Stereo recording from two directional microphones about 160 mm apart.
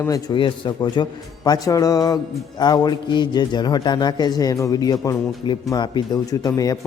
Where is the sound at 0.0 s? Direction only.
25° left (ahead or behind).